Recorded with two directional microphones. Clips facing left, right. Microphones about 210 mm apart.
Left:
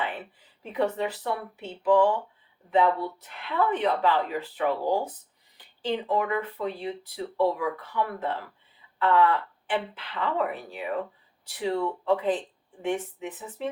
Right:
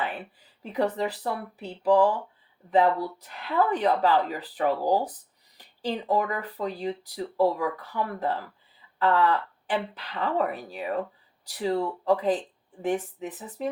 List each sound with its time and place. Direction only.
0.7 s speech: 35° right (ahead or behind)